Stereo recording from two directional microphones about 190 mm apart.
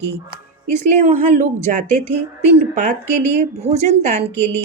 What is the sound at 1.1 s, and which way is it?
Speech, 40° right (ahead or behind).